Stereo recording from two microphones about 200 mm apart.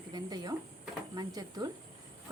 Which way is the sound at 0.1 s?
20° right (ahead or behind).